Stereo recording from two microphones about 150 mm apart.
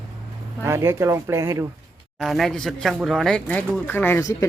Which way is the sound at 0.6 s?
20° right (ahead or behind).